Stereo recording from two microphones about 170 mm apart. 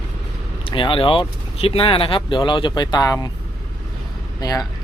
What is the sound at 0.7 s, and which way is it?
Speech, 30° left (ahead or behind).